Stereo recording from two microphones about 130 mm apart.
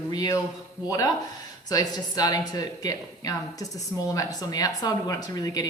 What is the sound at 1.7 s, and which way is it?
Speech, 30° left (ahead or behind).